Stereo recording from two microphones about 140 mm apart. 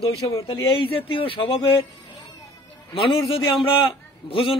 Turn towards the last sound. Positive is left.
turn(degrees=40)  # may be behind; listen again after turning